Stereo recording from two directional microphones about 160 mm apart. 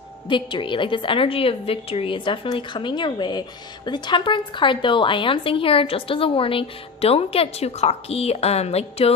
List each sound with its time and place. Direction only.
0.3 s a woman's voice: 30° left (ahead or behind)